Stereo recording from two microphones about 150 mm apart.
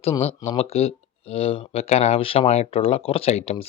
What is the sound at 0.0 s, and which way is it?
Speech, 40° left (ahead or behind).